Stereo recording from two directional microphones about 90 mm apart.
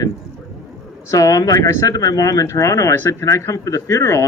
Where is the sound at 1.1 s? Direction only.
40° left (ahead or behind).